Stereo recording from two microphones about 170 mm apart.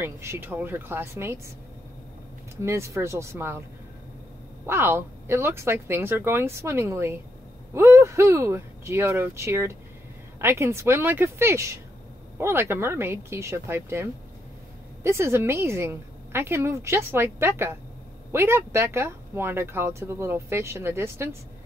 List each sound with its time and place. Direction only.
0.0 s speech: 15° right (ahead or behind)
2.5 s speech: 15° right (ahead or behind)
4.6 s speech: 15° right (ahead or behind)